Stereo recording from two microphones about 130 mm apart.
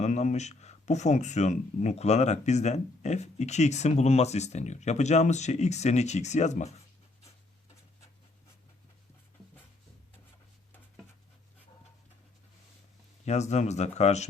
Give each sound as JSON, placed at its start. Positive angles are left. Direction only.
{"t": 0.0, "sound": "speech", "side_deg": 65}
{"t": 13.2, "sound": "speech", "side_deg": 60}